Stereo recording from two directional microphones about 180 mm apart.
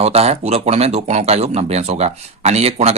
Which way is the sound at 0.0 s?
35° right (ahead or behind).